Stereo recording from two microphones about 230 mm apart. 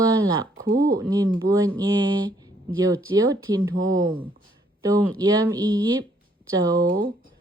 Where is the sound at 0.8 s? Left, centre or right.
Centre.